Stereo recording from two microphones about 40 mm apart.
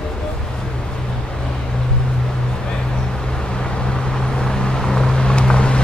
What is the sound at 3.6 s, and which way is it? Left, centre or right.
Vehicle, left.